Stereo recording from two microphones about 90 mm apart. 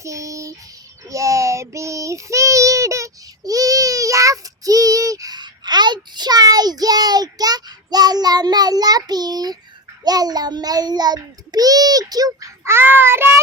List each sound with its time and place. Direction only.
0.0 s a sound: 35° right (ahead or behind)
1.1 s child singing: 35° right (ahead or behind)
12.6 s child singing: 25° right (ahead or behind)